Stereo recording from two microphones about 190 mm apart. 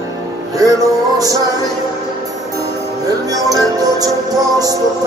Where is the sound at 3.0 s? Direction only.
20° right (ahead or behind).